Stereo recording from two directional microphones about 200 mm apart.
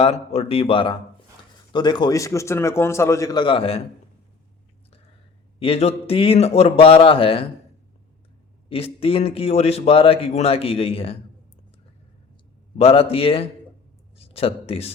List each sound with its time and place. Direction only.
0.0 s a man's voice: 30° left (ahead or behind)
5.5 s a man's voice: 30° left (ahead or behind)
8.7 s a man's voice: 30° left (ahead or behind)
12.7 s a man's voice: 30° left (ahead or behind)